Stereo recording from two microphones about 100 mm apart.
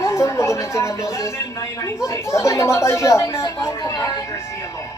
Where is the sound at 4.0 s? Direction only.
40° left (ahead or behind).